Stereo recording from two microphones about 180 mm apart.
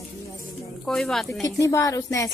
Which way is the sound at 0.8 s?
Centre (ahead or behind).